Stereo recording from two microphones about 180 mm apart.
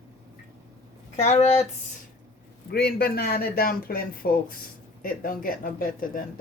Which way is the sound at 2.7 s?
60° left (ahead or behind).